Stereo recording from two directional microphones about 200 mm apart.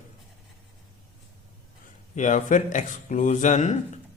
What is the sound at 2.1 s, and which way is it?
Speech, 40° left (ahead or behind).